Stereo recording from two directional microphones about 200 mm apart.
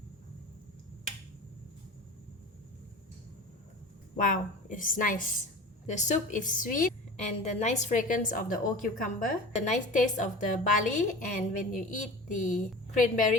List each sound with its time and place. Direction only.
4.2 s a woman's voice: 40° left (ahead or behind)